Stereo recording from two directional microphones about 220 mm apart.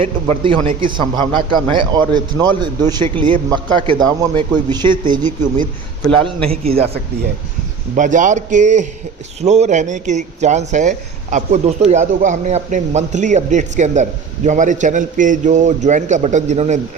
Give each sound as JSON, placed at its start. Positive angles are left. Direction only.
{"t": 0.4, "sound": "a man's voice", "side_deg": -25}
{"t": 5.2, "sound": "speech", "side_deg": -35}
{"t": 6.1, "sound": "a man's voice", "side_deg": -25}
{"t": 7.9, "sound": "speech", "side_deg": -35}